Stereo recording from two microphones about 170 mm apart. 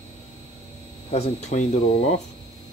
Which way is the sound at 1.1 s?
40° left (ahead or behind).